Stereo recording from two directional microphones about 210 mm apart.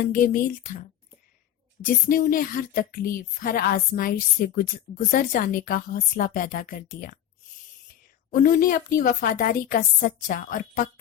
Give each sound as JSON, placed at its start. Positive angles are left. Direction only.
{"t": 0.0, "sound": "a woman's voice", "side_deg": 40}
{"t": 1.8, "sound": "speech", "side_deg": 40}
{"t": 8.3, "sound": "a woman's voice", "side_deg": 40}